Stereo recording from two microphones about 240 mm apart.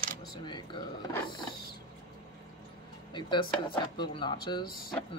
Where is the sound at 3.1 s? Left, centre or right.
Centre.